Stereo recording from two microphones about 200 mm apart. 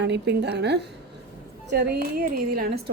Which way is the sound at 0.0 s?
60° right (ahead or behind).